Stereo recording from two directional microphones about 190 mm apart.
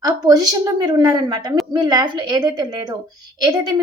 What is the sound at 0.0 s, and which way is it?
A woman's voice, 20° right (ahead or behind).